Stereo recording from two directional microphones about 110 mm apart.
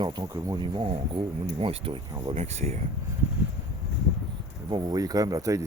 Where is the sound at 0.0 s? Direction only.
40° right (ahead or behind).